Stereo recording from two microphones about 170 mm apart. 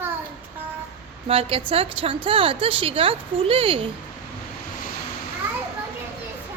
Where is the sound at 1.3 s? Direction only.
35° right (ahead or behind).